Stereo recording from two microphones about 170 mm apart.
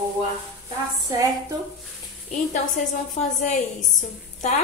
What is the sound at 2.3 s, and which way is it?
A woman's voice, 45° left (ahead or behind).